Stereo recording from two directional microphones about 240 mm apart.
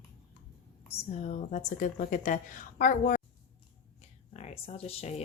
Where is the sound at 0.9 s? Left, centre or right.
Left.